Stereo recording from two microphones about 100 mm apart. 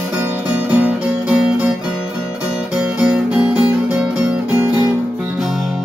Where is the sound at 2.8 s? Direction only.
10° right (ahead or behind).